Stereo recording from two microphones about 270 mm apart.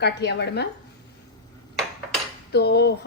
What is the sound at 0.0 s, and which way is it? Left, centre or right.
Speech, left.